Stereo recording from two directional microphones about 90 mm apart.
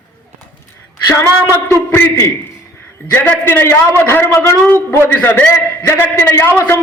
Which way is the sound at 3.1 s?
20° left (ahead or behind).